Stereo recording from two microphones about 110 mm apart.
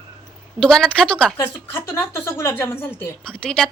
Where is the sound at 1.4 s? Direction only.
20° left (ahead or behind).